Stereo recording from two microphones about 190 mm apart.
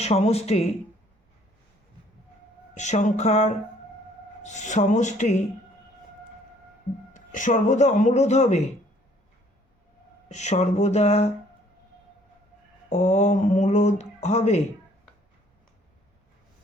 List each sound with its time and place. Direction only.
0.0 s speech: 35° left (ahead or behind)
2.7 s speech: 40° left (ahead or behind)
7.1 s speech: 40° left (ahead or behind)
10.2 s speech: 35° left (ahead or behind)
12.9 s speech: 40° left (ahead or behind)